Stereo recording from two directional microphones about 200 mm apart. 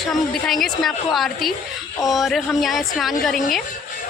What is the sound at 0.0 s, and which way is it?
A woman's voice, centre (ahead or behind).